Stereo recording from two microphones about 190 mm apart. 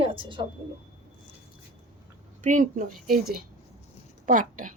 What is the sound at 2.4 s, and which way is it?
Speech, 40° right (ahead or behind).